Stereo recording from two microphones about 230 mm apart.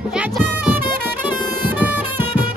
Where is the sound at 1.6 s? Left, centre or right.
Centre.